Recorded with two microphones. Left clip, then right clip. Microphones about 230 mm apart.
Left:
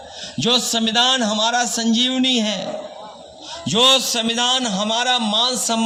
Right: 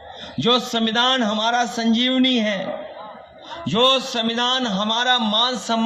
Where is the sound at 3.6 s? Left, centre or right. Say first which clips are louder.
Left 3 dB; left.